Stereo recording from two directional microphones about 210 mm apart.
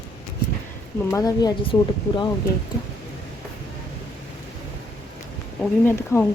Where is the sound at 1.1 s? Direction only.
20° left (ahead or behind).